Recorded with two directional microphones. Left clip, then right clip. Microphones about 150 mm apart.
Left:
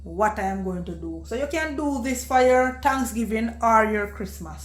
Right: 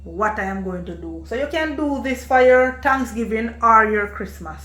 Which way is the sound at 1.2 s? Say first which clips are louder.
Right 4 dB; 50° left (ahead or behind).